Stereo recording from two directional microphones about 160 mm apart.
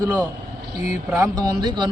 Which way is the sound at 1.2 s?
25° right (ahead or behind).